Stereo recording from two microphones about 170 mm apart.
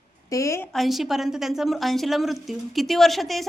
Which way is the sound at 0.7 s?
Centre (ahead or behind).